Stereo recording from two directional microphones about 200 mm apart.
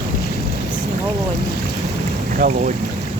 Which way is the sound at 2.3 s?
40° right (ahead or behind).